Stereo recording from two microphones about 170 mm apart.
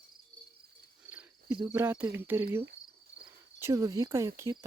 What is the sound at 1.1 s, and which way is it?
Cricket, 10° right (ahead or behind).